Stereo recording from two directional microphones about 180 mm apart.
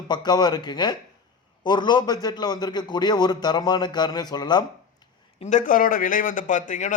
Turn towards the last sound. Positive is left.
turn(degrees=45)  # may be behind; listen again after turning